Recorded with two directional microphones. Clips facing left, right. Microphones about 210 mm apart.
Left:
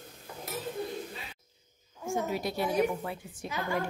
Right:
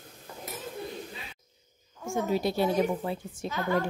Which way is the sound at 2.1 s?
30° right (ahead or behind).